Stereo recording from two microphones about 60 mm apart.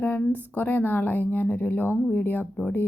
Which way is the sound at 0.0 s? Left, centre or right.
Left.